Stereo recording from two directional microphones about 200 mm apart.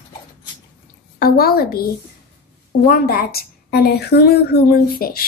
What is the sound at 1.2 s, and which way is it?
A woman's voice, 50° left (ahead or behind).